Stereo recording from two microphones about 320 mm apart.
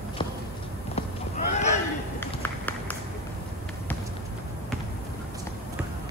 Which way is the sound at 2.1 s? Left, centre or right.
Centre.